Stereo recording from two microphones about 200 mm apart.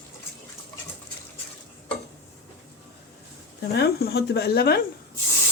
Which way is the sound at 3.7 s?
50° left (ahead or behind).